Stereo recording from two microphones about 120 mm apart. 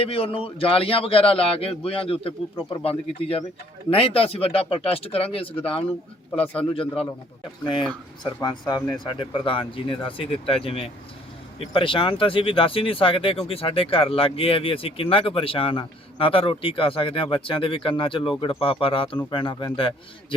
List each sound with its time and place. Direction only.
0.0 s speech: 50° left (ahead or behind)